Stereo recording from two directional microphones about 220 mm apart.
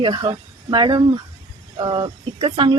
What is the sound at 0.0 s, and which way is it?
A woman's voice, 20° right (ahead or behind).